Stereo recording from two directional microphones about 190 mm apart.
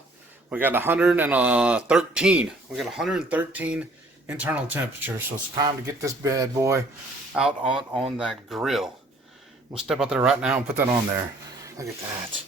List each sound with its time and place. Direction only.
0.5 s speech: 10° right (ahead or behind)
7.3 s speech: 5° right (ahead or behind)
11.8 s speech: 15° right (ahead or behind)